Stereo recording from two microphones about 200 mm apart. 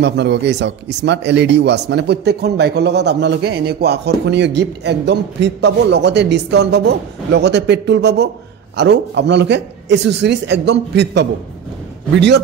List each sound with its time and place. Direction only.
0.0 s speech: 60° right (ahead or behind)